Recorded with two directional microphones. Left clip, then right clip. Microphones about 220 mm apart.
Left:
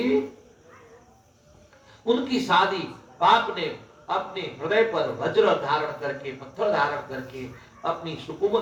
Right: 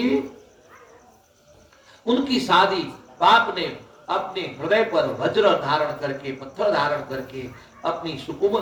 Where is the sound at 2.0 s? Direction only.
50° right (ahead or behind).